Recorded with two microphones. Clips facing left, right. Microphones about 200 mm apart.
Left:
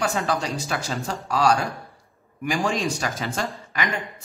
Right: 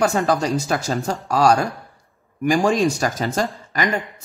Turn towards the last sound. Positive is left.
turn(degrees=-40)  # may be behind; listen again after turning